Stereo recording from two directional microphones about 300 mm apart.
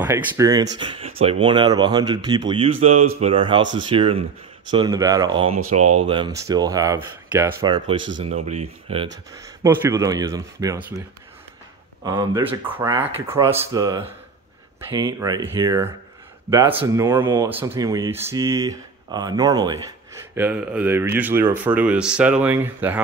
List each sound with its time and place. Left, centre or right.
0.0 s speech: centre
9.6 s speech: centre
12.0 s speech: centre